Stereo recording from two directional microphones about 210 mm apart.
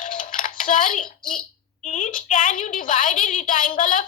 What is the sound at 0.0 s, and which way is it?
Dishes, 40° left (ahead or behind).